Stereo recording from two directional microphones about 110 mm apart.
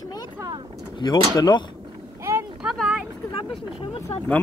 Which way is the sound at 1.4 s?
40° left (ahead or behind).